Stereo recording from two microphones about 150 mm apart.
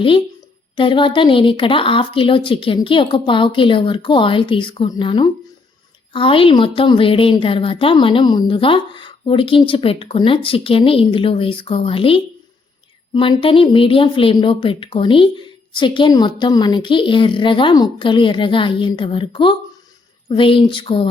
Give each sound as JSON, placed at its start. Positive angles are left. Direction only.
{"t": 0.8, "sound": "a woman's voice", "side_deg": 35}